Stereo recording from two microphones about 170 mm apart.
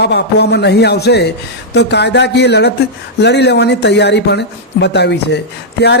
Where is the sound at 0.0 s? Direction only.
75° left (ahead or behind).